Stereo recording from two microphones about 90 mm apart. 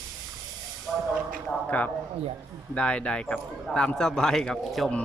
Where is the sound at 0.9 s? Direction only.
Centre (ahead or behind).